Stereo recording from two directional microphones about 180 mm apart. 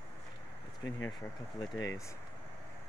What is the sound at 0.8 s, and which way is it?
Speech, 15° left (ahead or behind).